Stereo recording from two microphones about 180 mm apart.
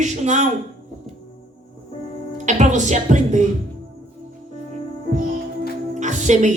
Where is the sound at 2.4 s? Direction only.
40° right (ahead or behind).